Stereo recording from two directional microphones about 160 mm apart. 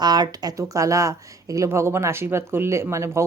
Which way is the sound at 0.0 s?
25° right (ahead or behind).